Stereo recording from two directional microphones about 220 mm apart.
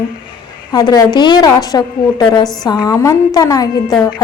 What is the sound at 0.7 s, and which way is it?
A woman's voice, 15° left (ahead or behind).